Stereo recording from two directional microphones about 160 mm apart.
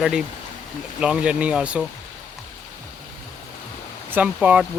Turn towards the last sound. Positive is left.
turn(degrees=-10)  # may be behind; listen again after turning